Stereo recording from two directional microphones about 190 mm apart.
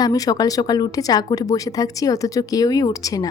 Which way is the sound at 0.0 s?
20° left (ahead or behind).